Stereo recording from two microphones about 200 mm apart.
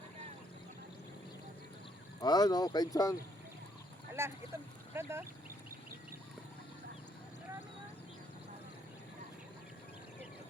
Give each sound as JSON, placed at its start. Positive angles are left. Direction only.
{"t": 2.2, "sound": "speech", "side_deg": 20}
{"t": 4.1, "sound": "speech", "side_deg": -15}